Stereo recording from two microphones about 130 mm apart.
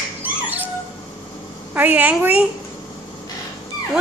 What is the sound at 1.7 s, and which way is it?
Speech, 10° right (ahead or behind).